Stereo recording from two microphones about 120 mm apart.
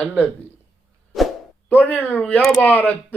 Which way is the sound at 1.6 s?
15° left (ahead or behind).